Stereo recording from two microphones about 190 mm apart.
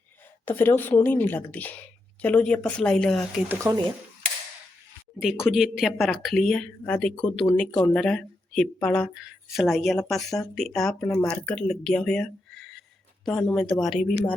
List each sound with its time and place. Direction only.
0.4 s a woman's voice: 10° left (ahead or behind)
3.5 s speech: 15° right (ahead or behind)
5.2 s speech: 5° right (ahead or behind)